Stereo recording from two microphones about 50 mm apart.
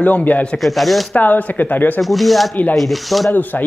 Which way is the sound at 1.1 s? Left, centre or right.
Left.